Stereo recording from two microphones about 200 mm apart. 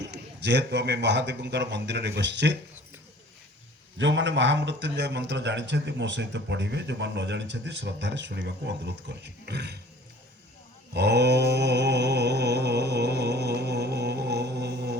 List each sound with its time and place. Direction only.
0.0 s speech: 60° right (ahead or behind)
3.9 s speech: 65° right (ahead or behind)
10.9 s a sound: 55° right (ahead or behind)